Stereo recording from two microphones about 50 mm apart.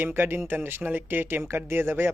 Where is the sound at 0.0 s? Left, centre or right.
Right.